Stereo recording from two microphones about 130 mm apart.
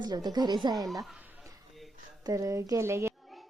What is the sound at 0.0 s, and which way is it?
Speech, 35° right (ahead or behind).